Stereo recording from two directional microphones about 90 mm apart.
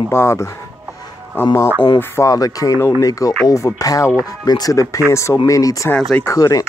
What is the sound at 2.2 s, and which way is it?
Speech, 40° left (ahead or behind).